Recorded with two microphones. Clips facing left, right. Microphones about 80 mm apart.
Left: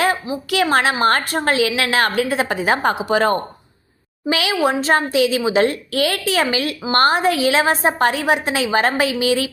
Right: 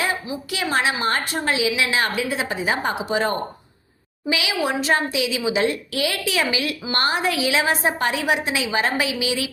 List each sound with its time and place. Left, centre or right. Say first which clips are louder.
0.5 s a woman's voice: left 6 dB; left
4.3 s a woman's voice: left 5 dB; left